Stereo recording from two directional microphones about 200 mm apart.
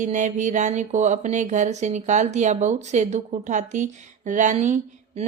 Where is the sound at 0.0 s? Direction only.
40° right (ahead or behind).